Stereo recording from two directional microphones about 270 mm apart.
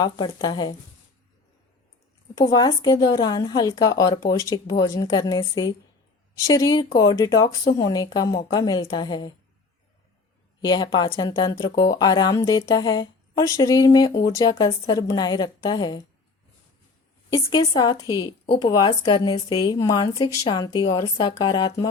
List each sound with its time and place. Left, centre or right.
0.0 s speech: centre
2.4 s speech: centre
10.6 s speech: centre
17.2 s speech: centre